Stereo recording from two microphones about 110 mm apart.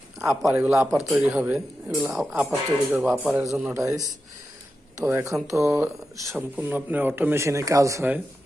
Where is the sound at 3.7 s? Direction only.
30° right (ahead or behind).